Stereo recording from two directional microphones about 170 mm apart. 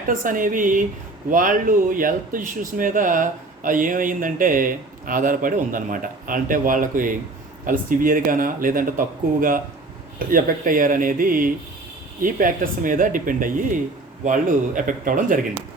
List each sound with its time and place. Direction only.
0.1 s speech: 50° right (ahead or behind)